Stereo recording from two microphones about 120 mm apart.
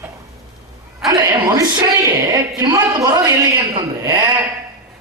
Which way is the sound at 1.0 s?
25° right (ahead or behind).